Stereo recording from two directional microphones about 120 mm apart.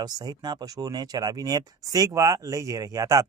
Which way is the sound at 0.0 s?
35° right (ahead or behind).